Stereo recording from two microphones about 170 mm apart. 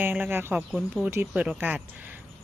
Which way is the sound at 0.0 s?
10° right (ahead or behind).